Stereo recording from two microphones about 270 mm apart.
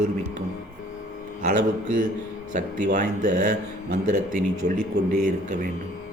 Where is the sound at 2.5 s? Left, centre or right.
Right.